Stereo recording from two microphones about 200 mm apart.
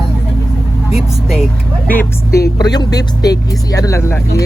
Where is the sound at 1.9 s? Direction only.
10° left (ahead or behind).